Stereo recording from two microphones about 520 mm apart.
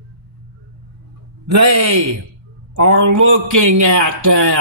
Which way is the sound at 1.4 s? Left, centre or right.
Right.